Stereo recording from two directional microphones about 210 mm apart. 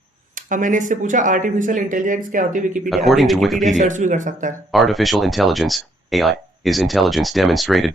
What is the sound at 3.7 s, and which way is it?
Speech, 35° right (ahead or behind).